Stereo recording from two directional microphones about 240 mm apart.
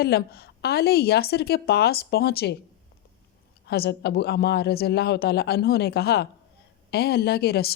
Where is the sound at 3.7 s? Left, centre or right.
Left.